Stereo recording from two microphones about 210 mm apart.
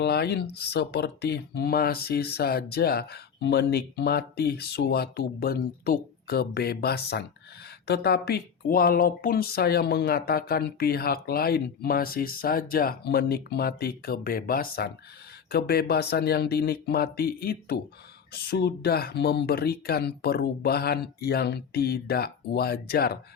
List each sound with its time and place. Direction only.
0.0 s speech: 50° left (ahead or behind)